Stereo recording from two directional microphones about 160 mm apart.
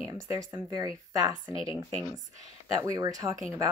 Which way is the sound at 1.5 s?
35° left (ahead or behind).